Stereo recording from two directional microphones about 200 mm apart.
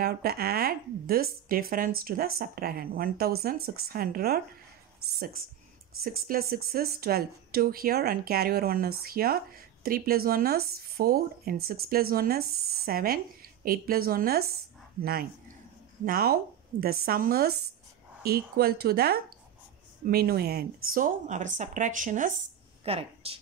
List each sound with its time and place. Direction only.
0.0 s speech: 50° right (ahead or behind)
6.0 s a woman's voice: 45° right (ahead or behind)
22.8 s speech: 30° right (ahead or behind)